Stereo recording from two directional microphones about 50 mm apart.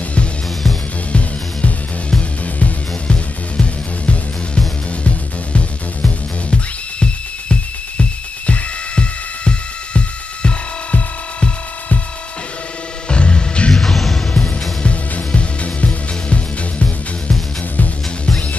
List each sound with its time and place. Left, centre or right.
1.1 s music: left
8.0 s music: left
13.1 s music: left
14.8 s music: left